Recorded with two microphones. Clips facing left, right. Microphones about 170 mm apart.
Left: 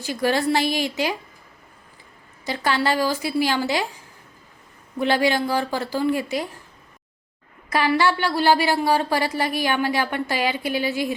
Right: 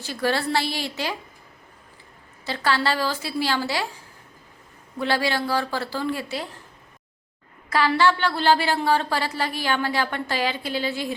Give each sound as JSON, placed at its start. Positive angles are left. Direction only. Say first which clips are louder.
{"t": 0.0, "sound": "a woman's voice", "louder": "left 3 dB", "side_deg": 15}
{"t": 2.4, "sound": "a woman's voice", "louder": "left 1 dB", "side_deg": 15}
{"t": 4.9, "sound": "a woman's voice", "louder": "left 4 dB", "side_deg": 15}
{"t": 7.7, "sound": "a woman's voice", "louder": "even", "side_deg": 15}